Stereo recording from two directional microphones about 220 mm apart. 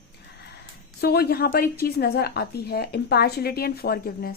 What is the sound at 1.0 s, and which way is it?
A woman's voice, 45° left (ahead or behind).